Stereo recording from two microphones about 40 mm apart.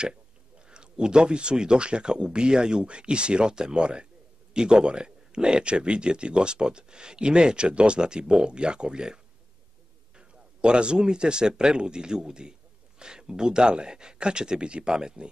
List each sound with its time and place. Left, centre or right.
0.7 s a man's voice: right